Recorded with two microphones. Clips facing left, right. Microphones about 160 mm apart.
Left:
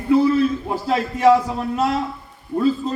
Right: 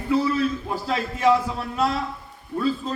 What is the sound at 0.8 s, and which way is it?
A man's voice, 40° left (ahead or behind).